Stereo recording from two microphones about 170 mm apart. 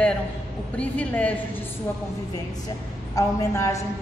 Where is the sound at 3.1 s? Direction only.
20° left (ahead or behind).